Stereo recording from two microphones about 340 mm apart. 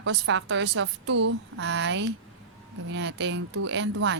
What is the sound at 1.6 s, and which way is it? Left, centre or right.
A woman's voice, right.